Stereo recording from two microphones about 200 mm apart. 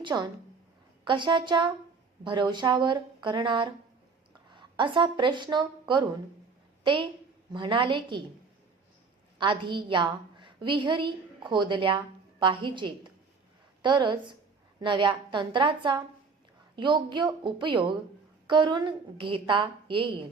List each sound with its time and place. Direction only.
0.0 s a woman's voice: 20° right (ahead or behind)
9.4 s a woman's voice: 25° right (ahead or behind)